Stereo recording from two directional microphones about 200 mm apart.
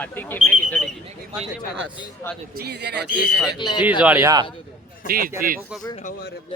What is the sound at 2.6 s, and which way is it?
Speech, 55° right (ahead or behind).